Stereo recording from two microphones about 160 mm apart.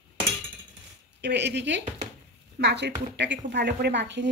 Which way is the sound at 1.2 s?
90° right.